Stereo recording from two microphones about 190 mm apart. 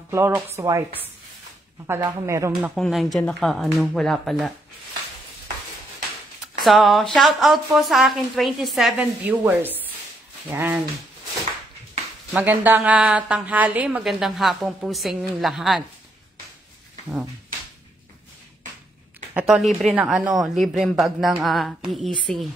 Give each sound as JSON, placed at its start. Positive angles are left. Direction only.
{"t": 0.1, "sound": "a woman's voice", "side_deg": -15}
{"t": 2.7, "sound": "a woman's voice", "side_deg": 0}
{"t": 6.6, "sound": "a woman's voice", "side_deg": 0}
{"t": 12.3, "sound": "a woman's voice", "side_deg": -10}
{"t": 19.3, "sound": "a woman's voice", "side_deg": -5}